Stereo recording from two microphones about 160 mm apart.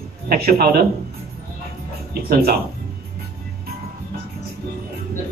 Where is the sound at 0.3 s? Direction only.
70° right (ahead or behind).